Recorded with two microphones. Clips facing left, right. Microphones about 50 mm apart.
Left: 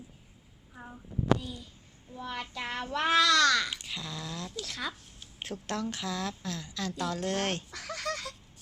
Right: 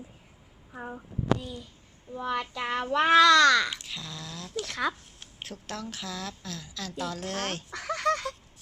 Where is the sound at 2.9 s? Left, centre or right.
Right.